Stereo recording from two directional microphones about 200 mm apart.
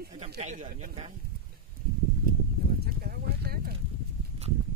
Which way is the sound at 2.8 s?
50° right (ahead or behind).